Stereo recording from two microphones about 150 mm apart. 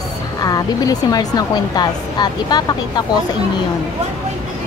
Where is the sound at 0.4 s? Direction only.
25° left (ahead or behind).